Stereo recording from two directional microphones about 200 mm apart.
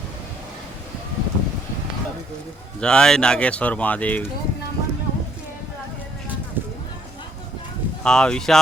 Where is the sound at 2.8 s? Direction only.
5° left (ahead or behind).